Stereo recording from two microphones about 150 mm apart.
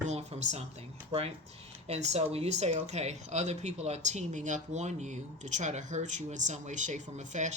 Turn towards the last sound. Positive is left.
turn(degrees=-55)  # may be behind; listen again after turning